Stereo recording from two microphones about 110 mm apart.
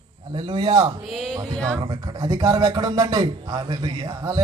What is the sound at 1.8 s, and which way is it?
A man's voice, 40° right (ahead or behind).